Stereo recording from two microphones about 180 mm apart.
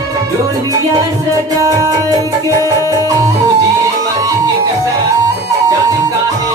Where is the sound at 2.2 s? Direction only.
20° right (ahead or behind).